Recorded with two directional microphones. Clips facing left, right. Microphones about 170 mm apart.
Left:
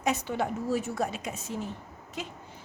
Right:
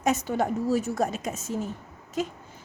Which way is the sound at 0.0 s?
45° right (ahead or behind).